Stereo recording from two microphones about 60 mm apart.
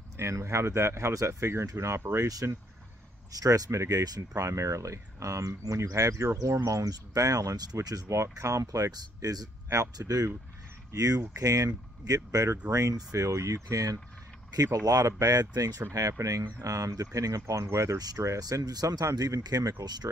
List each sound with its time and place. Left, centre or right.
0.2 s speech: right
3.3 s speech: right
9.7 s speech: right
10.9 s speech: right
14.5 s speech: right
14.9 s speech: right
15.9 s speech: right